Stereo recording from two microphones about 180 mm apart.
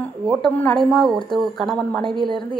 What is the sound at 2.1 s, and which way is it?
Speech, 25° right (ahead or behind).